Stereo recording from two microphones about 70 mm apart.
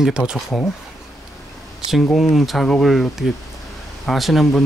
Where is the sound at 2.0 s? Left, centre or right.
Centre.